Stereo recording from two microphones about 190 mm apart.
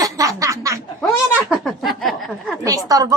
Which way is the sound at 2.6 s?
20° right (ahead or behind).